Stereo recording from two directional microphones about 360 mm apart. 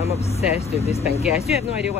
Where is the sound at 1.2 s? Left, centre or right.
Centre.